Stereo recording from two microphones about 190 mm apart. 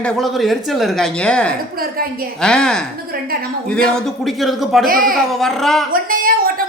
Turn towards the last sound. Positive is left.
turn(degrees=-50)  # may be behind; listen again after turning